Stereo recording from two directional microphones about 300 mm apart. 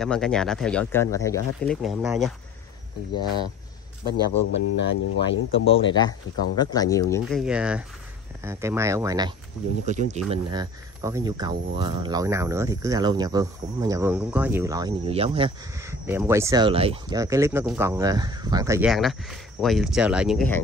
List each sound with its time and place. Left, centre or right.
0.0 s speech: centre
4.6 s speech: left
5.7 s speech: centre
9.8 s speech: right; by 20.6 s centre